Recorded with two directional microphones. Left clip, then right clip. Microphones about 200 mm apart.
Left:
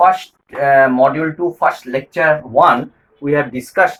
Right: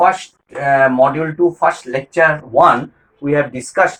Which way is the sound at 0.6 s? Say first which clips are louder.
Left 1 dB; 15° left (ahead or behind).